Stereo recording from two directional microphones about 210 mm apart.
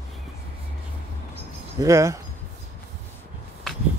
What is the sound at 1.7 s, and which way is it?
Speech, 15° right (ahead or behind).